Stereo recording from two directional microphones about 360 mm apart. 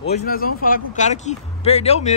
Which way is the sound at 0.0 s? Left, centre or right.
Left.